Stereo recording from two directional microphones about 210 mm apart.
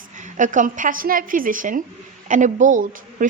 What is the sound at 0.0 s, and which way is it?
A woman's voice, 35° right (ahead or behind).